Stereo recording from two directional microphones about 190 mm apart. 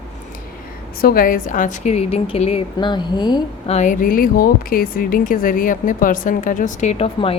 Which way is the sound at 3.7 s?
40° left (ahead or behind).